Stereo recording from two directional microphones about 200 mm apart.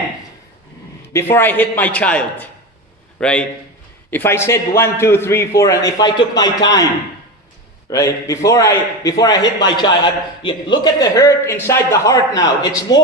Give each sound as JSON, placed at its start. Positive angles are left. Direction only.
{"t": 1.1, "sound": "a man's voice", "side_deg": 10}
{"t": 7.9, "sound": "a man's voice", "side_deg": 15}